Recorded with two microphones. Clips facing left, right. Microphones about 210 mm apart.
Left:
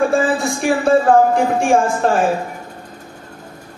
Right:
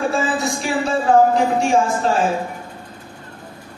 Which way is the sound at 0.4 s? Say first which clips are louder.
Left 3 dB; 55° left (ahead or behind).